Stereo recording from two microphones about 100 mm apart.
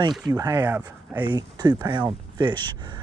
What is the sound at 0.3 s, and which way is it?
Speech, 35° right (ahead or behind).